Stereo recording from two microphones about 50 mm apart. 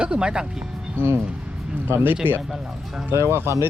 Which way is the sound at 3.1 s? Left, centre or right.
Right.